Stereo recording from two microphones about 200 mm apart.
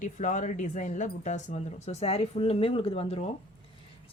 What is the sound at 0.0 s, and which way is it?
A woman's voice, 40° left (ahead or behind).